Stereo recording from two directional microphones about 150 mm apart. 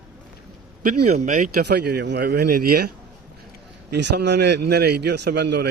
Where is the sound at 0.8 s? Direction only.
70° right (ahead or behind).